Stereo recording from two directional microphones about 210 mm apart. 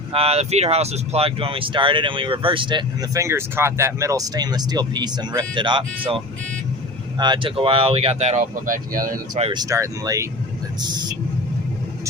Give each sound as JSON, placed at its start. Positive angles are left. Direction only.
{"t": 0.1, "sound": "speech", "side_deg": -30}
{"t": 9.5, "sound": "speech", "side_deg": -15}